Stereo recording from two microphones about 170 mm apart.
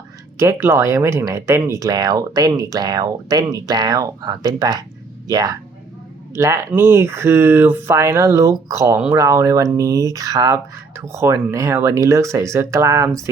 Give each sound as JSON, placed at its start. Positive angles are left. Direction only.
{"t": 0.3, "sound": "speech", "side_deg": -15}